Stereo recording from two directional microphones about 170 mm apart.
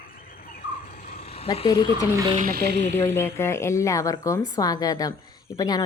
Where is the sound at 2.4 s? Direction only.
70° right (ahead or behind).